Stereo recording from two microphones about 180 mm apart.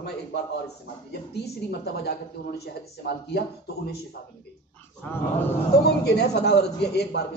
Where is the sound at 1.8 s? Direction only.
60° left (ahead or behind).